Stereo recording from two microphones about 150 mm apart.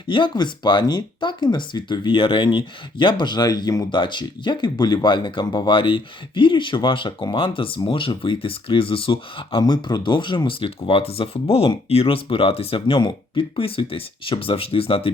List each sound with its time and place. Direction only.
0.1 s speech: 30° left (ahead or behind)